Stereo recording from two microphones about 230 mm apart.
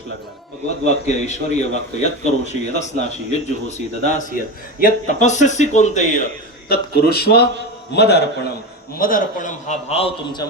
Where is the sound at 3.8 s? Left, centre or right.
Left.